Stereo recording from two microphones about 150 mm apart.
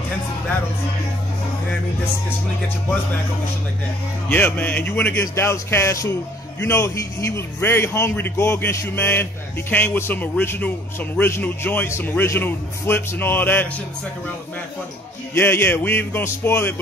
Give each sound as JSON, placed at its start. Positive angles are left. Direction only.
{"t": 4.3, "sound": "speech", "side_deg": 10}
{"t": 15.3, "sound": "speech", "side_deg": 15}